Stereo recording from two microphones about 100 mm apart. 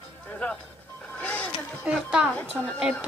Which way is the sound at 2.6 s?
10° left (ahead or behind).